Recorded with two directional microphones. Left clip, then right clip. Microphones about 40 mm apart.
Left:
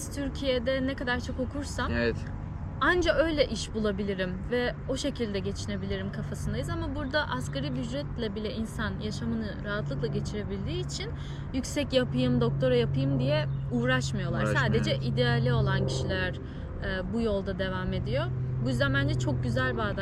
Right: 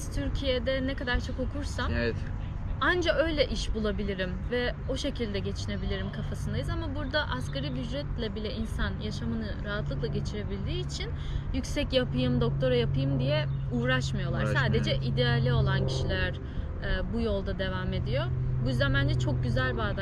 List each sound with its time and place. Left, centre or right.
0.2 s a woman's voice: centre
2.8 s a woman's voice: centre